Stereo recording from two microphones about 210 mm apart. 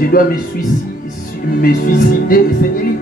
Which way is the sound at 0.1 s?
45° left (ahead or behind).